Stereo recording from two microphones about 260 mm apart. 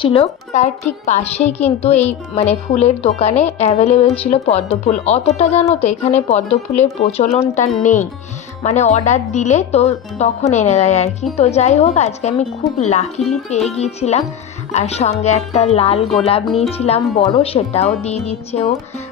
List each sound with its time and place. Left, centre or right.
0.0 s a woman's voice: left